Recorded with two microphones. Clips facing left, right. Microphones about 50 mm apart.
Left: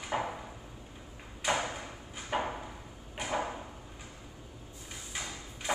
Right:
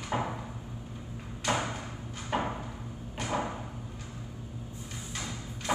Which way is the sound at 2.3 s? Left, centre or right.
Centre.